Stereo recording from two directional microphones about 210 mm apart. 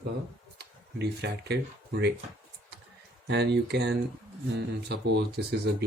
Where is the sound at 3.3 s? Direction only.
50° right (ahead or behind).